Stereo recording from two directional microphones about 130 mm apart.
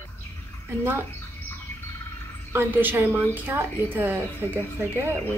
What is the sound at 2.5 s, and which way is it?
Speech, 15° right (ahead or behind).